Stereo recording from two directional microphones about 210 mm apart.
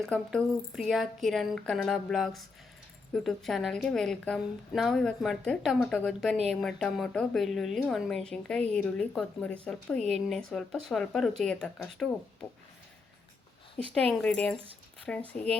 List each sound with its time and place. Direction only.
0.0 s a woman's voice: 5° left (ahead or behind)
14.1 s a woman's voice: 5° left (ahead or behind)